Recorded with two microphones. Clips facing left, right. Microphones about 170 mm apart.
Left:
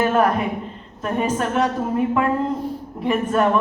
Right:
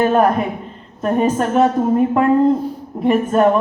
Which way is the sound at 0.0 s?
40° right (ahead or behind).